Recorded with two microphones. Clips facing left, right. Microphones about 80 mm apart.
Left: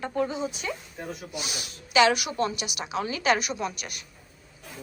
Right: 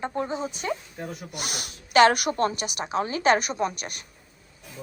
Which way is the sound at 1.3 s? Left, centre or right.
Right.